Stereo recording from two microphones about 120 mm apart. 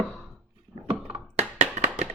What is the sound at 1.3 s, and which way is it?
Tap, 75° right (ahead or behind).